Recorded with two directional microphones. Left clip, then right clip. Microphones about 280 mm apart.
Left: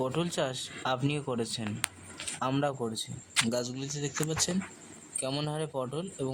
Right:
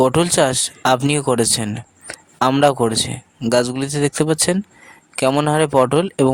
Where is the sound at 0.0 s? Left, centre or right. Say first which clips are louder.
Right 17 dB; right.